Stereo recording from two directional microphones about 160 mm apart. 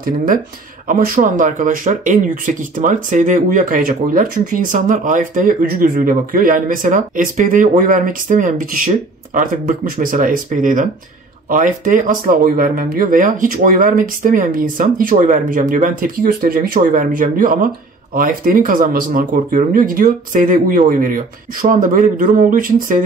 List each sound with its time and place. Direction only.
0.8 s speech: 60° right (ahead or behind)